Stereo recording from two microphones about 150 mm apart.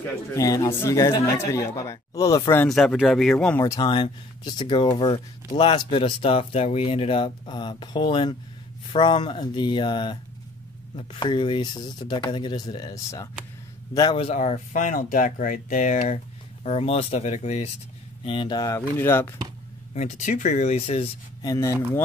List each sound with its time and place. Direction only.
0.0 s speech: 20° left (ahead or behind)
2.6 s speech: centre (ahead or behind)
3.5 s speech: 20° left (ahead or behind)
14.1 s speech: 45° left (ahead or behind)
16.6 s speech: 45° left (ahead or behind)
18.2 s speech: 35° left (ahead or behind); by 19.3 s 15° left (ahead or behind)
19.9 s speech: 55° left (ahead or behind)
21.4 s speech: 25° left (ahead or behind)